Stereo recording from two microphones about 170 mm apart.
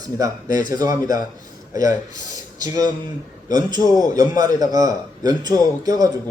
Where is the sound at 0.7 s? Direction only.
20° right (ahead or behind).